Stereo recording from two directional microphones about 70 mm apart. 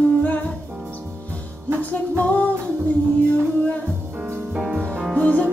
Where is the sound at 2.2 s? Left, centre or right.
Left.